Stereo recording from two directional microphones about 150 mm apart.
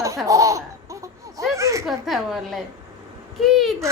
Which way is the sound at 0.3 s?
20° right (ahead or behind).